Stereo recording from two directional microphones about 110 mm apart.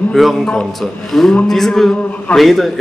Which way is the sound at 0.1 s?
Centre (ahead or behind).